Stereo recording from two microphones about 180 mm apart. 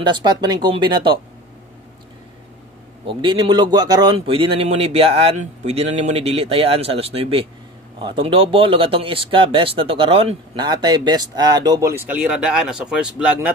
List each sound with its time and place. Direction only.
0.0 s speech: 25° right (ahead or behind)
3.1 s speech: 25° right (ahead or behind); by 13.5 s 5° right (ahead or behind)